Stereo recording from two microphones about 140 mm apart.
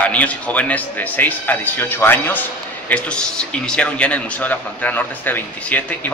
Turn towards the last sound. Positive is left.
turn(degrees=10)  # may be behind; listen again after turning